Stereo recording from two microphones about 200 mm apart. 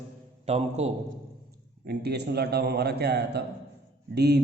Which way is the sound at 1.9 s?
55° right (ahead or behind).